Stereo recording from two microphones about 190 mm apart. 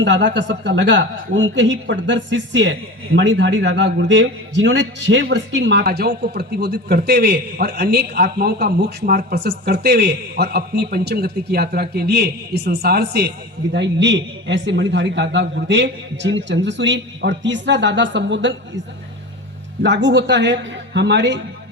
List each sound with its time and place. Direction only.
0.0 s a woman's voice: 70° right (ahead or behind)
19.8 s a woman's voice: 65° right (ahead or behind)